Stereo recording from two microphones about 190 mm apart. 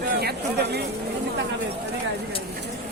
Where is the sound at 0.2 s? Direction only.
55° right (ahead or behind).